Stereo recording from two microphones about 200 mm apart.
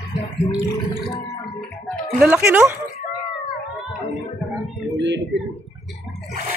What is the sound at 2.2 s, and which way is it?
Speech, 10° right (ahead or behind).